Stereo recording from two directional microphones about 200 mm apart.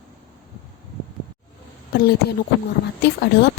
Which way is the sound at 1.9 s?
50° left (ahead or behind).